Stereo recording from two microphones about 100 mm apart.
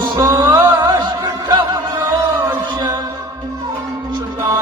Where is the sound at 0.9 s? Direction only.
40° right (ahead or behind).